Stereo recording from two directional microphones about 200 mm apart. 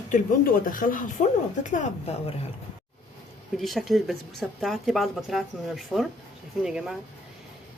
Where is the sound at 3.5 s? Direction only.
Centre (ahead or behind).